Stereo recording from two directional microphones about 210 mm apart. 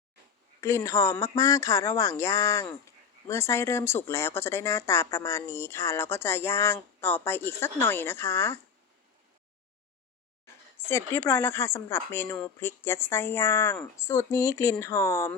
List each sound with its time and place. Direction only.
0.6 s speech: 15° left (ahead or behind)
10.4 s speech: 10° left (ahead or behind)